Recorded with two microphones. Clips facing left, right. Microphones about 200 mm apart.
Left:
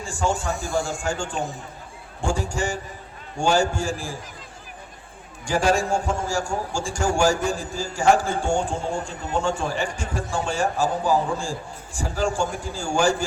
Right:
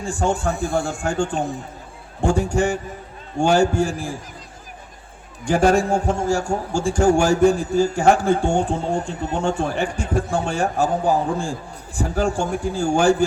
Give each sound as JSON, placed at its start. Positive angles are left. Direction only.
{"t": 0.0, "sound": "a man's voice", "side_deg": -60}
{"t": 5.5, "sound": "a man's voice", "side_deg": -60}